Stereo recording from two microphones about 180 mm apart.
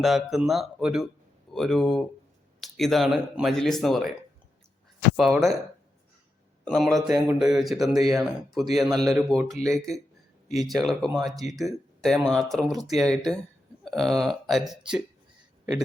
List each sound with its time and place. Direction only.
0.0 s speech: centre (ahead or behind)
5.1 s speech: centre (ahead or behind)
6.7 s speech: centre (ahead or behind)
7.8 s speech: 20° right (ahead or behind)
8.1 s speech: centre (ahead or behind)
10.6 s speech: centre (ahead or behind)